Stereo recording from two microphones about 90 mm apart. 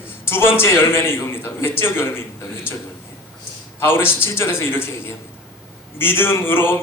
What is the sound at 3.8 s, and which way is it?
A man's voice, 25° left (ahead or behind).